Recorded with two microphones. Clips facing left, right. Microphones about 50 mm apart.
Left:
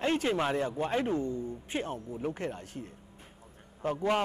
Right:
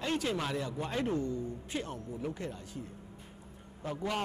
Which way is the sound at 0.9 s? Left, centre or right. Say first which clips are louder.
Right 1 dB; left.